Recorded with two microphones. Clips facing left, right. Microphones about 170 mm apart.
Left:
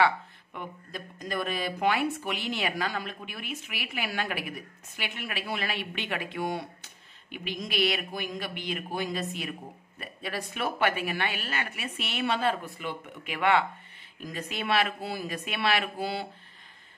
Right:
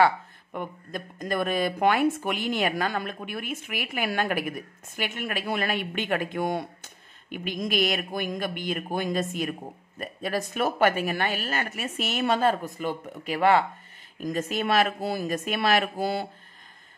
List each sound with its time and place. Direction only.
0.0 s speech: 50° right (ahead or behind)